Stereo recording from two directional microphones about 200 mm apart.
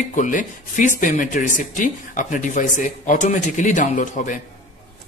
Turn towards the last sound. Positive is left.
turn(degrees=40)  # may be behind; listen again after turning